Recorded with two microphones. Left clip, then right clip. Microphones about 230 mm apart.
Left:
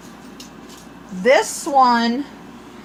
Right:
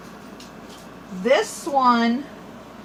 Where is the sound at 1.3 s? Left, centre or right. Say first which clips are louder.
Left 4 dB; left.